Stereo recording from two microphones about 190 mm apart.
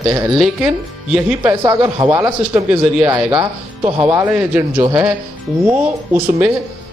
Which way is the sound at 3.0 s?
25° right (ahead or behind).